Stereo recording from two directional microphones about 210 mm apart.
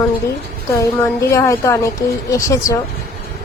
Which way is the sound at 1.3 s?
15° left (ahead or behind).